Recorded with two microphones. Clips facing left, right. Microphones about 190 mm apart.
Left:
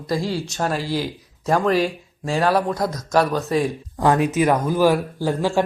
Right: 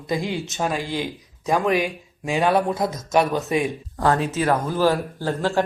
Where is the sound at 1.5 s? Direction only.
15° right (ahead or behind).